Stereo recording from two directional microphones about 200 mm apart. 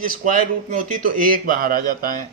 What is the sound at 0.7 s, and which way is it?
Speech, 40° right (ahead or behind).